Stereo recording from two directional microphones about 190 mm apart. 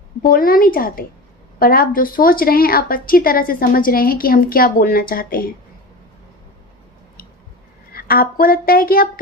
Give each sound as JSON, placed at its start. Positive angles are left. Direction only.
{"t": 0.2, "sound": "speech", "side_deg": 50}
{"t": 7.9, "sound": "speech", "side_deg": 50}